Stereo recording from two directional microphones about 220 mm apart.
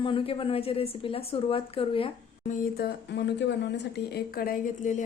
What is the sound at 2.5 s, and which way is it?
Speech, 40° left (ahead or behind).